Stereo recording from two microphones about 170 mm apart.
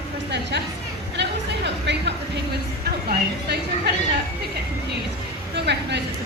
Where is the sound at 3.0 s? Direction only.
70° right (ahead or behind).